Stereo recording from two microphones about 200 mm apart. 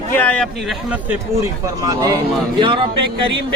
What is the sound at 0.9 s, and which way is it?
Speech, 10° right (ahead or behind).